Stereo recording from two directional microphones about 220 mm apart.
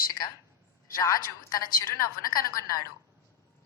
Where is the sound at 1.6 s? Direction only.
40° left (ahead or behind).